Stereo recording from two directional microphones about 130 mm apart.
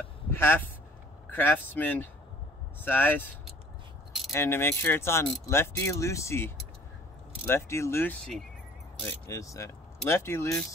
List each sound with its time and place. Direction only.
0.3 s speech: 15° left (ahead or behind)
4.3 s mechanisms: 20° left (ahead or behind)
9.3 s mechanisms: 25° left (ahead or behind)